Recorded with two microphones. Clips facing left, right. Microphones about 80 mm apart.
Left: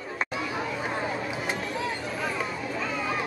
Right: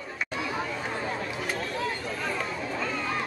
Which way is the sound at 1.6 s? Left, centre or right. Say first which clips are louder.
Even; centre.